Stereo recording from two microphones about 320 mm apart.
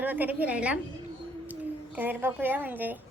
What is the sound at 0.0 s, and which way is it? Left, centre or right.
Speech, centre.